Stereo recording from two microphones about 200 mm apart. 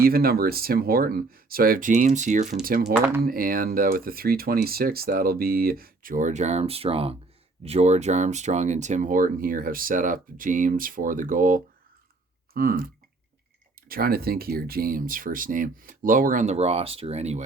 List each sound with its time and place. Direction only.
0.0 s speech: 50° right (ahead or behind)
2.8 s speech: 5° right (ahead or behind)
3.2 s speech: 45° right (ahead or behind)